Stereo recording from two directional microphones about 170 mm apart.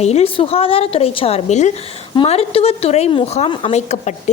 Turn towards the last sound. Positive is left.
turn(degrees=40)  # may be behind; listen again after turning